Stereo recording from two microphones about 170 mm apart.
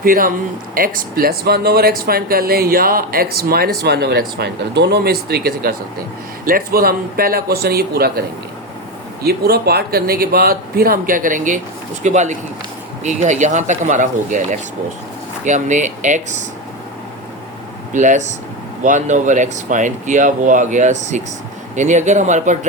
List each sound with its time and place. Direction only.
0.0 s speech: 55° right (ahead or behind)
9.2 s speech: 65° right (ahead or behind); by 16.4 s 45° right (ahead or behind)
17.9 s speech: 45° right (ahead or behind)